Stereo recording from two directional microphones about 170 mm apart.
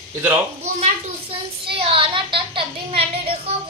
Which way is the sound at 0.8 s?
30° right (ahead or behind).